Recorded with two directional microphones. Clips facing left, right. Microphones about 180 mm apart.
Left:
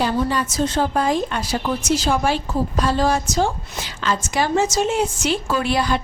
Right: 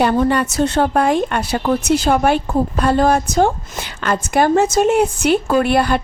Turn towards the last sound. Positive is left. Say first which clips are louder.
# right 6 dB
turn(degrees=-55)  # may be behind; listen again after turning